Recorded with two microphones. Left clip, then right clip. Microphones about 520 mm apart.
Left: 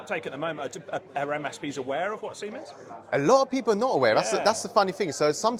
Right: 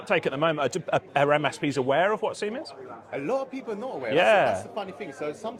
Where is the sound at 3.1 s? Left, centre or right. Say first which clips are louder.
Left 8 dB; left.